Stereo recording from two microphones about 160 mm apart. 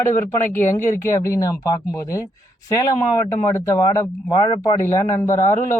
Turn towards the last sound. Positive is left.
turn(degrees=15)  # may be behind; listen again after turning